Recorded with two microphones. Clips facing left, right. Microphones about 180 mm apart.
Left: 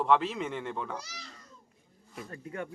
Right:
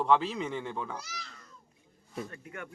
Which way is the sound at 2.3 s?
30° left (ahead or behind).